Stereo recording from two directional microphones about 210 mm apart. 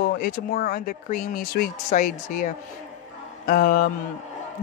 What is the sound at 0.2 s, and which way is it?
Speech, 45° left (ahead or behind).